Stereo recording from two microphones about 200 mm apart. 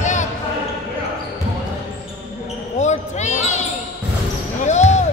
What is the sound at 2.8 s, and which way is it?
Basketball bounce, 35° left (ahead or behind).